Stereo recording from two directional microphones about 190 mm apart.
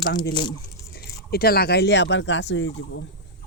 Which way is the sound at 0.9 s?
55° left (ahead or behind).